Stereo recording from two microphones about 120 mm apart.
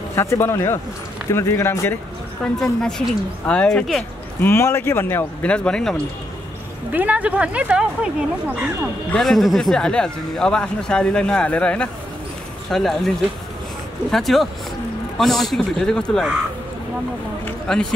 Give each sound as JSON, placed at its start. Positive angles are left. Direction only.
{"t": 0.1, "sound": "speech", "side_deg": 20}
{"t": 2.4, "sound": "speech", "side_deg": 5}
{"t": 4.4, "sound": "speech", "side_deg": 20}
{"t": 6.9, "sound": "speech", "side_deg": -15}
{"t": 9.1, "sound": "speech", "side_deg": 0}
{"t": 14.1, "sound": "speech", "side_deg": 0}
{"t": 17.7, "sound": "speech", "side_deg": 5}